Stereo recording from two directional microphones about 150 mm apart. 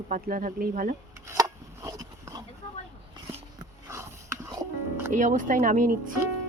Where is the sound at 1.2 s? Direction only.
20° right (ahead or behind).